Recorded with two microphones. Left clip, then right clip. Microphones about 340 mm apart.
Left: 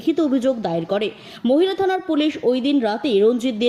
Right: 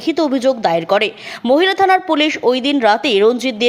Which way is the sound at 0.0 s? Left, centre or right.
Centre.